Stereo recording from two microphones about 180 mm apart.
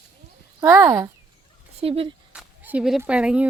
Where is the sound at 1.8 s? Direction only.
35° right (ahead or behind).